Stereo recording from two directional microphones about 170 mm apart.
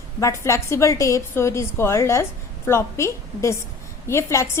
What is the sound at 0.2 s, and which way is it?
A woman's voice, 15° left (ahead or behind).